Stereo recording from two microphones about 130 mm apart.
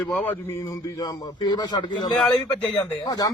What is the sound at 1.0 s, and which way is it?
A man's voice, 35° left (ahead or behind).